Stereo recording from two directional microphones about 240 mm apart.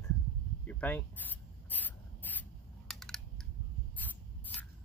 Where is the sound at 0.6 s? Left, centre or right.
Centre.